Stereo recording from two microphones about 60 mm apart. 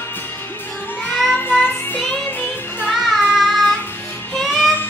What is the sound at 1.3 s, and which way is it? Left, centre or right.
Music, left.